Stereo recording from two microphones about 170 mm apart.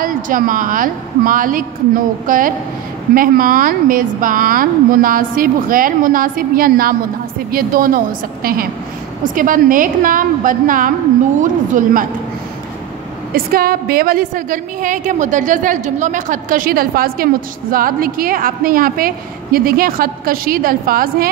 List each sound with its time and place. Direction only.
0.0 s a woman's voice: 55° right (ahead or behind)
13.3 s a woman's voice: 60° right (ahead or behind)